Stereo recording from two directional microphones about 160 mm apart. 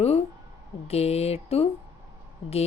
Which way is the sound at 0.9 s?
40° left (ahead or behind).